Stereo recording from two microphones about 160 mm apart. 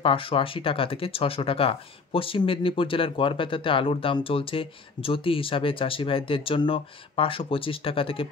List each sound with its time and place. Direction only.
0.0 s speech: 35° left (ahead or behind)